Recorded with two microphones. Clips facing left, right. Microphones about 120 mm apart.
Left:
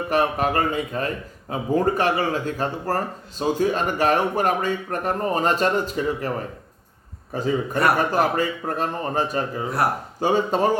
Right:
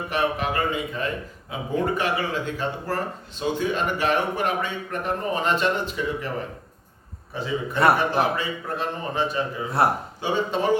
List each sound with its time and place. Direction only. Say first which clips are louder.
0.1 s a man's voice: left 4 dB; 40° left (ahead or behind)
7.3 s a man's voice: left 3 dB; 45° left (ahead or behind)